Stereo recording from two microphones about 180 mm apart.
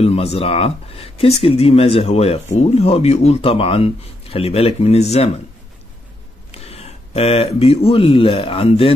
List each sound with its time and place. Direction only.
0.0 s speech: 35° left (ahead or behind)
6.5 s speech: 35° left (ahead or behind)